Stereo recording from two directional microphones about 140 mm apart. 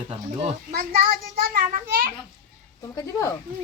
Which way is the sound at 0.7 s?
90° right.